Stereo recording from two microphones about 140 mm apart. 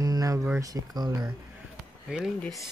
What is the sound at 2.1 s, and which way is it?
Speech, centre (ahead or behind).